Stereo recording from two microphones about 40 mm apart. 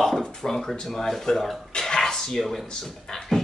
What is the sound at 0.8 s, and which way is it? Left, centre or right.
Speech, centre.